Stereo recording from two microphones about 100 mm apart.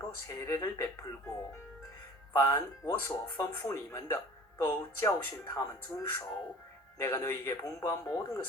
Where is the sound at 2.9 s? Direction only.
20° left (ahead or behind).